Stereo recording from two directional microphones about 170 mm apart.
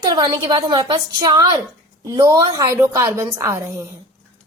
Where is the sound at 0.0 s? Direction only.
20° right (ahead or behind).